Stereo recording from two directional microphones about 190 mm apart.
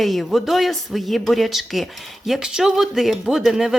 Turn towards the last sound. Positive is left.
turn(degrees=0)  # may be behind; listen again after turning